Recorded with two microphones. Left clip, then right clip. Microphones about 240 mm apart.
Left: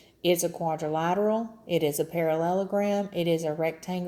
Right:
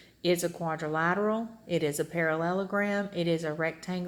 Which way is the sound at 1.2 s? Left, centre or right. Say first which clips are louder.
Left 4 dB; left.